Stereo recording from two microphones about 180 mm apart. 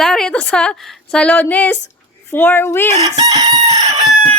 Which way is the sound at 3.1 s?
20° right (ahead or behind).